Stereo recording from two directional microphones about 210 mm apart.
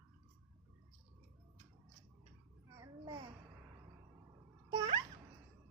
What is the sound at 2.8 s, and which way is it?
Babbling, 20° right (ahead or behind).